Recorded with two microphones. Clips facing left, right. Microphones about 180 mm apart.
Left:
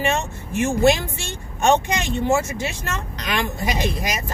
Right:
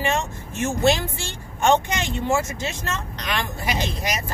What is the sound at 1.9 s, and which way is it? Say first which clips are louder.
Speech: left 3 dB; 20° left (ahead or behind).